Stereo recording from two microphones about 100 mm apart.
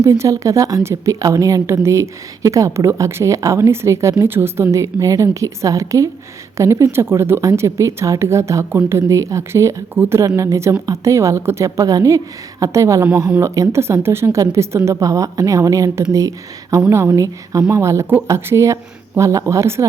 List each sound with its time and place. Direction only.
0.0 s a woman's voice: 30° right (ahead or behind)